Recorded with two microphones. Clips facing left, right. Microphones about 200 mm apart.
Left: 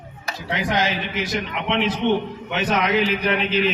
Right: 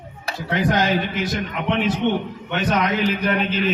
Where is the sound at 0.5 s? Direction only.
50° right (ahead or behind).